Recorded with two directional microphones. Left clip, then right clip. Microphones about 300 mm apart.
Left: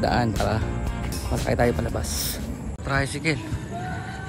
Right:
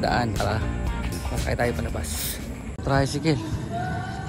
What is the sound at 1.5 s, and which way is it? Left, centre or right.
Speech, centre.